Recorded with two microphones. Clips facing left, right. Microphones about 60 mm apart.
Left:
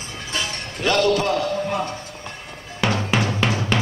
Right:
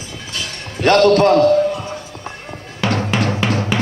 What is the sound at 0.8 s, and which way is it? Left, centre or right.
Speech, right.